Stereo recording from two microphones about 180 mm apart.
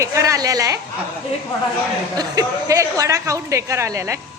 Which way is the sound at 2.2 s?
20° right (ahead or behind).